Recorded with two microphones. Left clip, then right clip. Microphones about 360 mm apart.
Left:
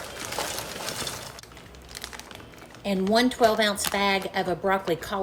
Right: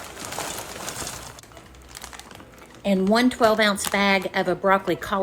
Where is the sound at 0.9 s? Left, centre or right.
Centre.